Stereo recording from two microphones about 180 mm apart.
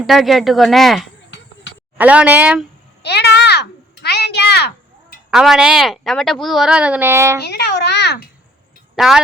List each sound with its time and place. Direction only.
0.0 s a woman's voice: centre (ahead or behind)
3.0 s a sound: 70° left (ahead or behind)
5.3 s a woman's voice: 5° right (ahead or behind)
7.4 s babbling: 65° left (ahead or behind)
9.0 s speech: centre (ahead or behind)